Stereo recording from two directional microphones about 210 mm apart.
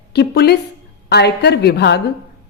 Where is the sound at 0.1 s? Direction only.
50° left (ahead or behind).